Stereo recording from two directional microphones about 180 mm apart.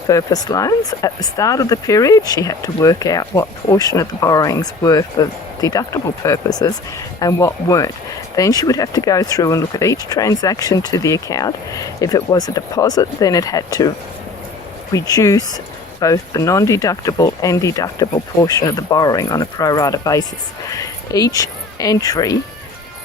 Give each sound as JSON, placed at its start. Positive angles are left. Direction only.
{"t": 0.1, "sound": "speech", "side_deg": 20}
{"t": 14.9, "sound": "speech", "side_deg": 20}